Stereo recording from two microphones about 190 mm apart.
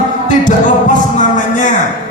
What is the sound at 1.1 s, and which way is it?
Music, 40° left (ahead or behind).